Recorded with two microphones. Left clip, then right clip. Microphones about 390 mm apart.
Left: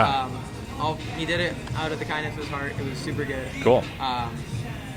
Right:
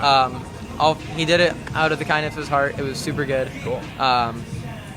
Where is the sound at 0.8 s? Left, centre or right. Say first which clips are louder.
Right 9 dB; right.